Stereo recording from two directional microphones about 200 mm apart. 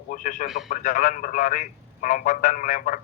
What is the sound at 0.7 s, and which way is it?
A man's voice, 40° left (ahead or behind).